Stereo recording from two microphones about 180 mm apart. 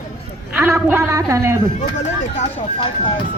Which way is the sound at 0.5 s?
10° right (ahead or behind).